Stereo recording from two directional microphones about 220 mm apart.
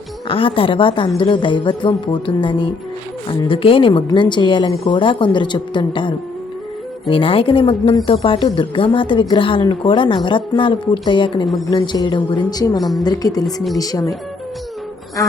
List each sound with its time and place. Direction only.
0.3 s a woman's voice: 25° left (ahead or behind)
11.4 s speech: centre (ahead or behind)
11.7 s a woman's voice: 20° left (ahead or behind)